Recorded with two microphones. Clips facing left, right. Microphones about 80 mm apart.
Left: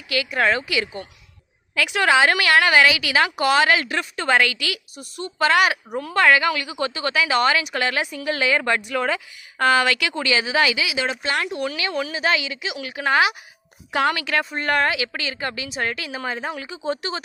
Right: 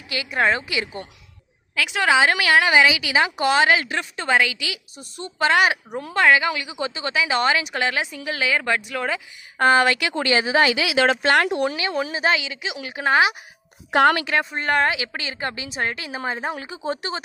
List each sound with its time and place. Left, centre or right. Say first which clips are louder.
0.3 s speech: right 1 dB; right
1.9 s a woman's voice: left 1 dB; centre
5.2 s speech: even; right
6.0 s a woman's voice: even; centre
9.6 s speech: right 1 dB; right
10.8 s speech: right 6 dB; right
11.5 s speech: right 4 dB; right
11.8 s speech: right 1 dB; right
12.3 s a woman's voice: even; centre
12.7 s speech: right 1 dB; right
13.9 s a woman's voice: right 5 dB; right
14.5 s speech: even; centre; by 17.2 s right